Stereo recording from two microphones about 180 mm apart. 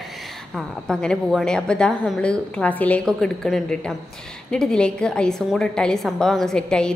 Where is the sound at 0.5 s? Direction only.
5° left (ahead or behind).